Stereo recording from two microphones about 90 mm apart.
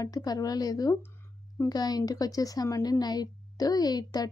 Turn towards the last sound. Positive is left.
turn(degrees=45)  # may be behind; listen again after turning